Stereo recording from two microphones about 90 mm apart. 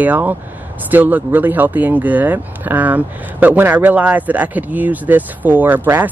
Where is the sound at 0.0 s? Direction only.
20° right (ahead or behind).